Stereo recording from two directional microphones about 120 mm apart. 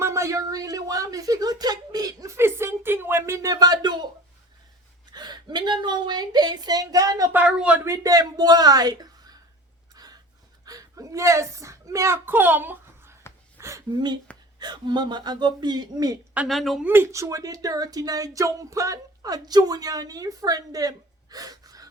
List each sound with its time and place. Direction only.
0.0 s a sound: 25° right (ahead or behind)
5.1 s speech: 35° right (ahead or behind)
7.3 s speech: 10° right (ahead or behind)
7.9 s speech: 30° right (ahead or behind)
9.9 s a sound: 35° right (ahead or behind)
10.7 s a woman's voice: 30° right (ahead or behind)
13.6 s a sound: 25° right (ahead or behind)
14.6 s speech: 35° right (ahead or behind)
16.5 s speech: centre (ahead or behind)
16.8 s speech: 20° right (ahead or behind)